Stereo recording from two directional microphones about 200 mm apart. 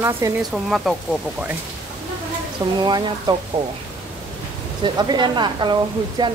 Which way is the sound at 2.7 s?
20° right (ahead or behind).